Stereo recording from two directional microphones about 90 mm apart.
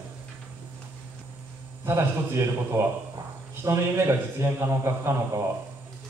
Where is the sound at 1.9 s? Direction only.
35° right (ahead or behind).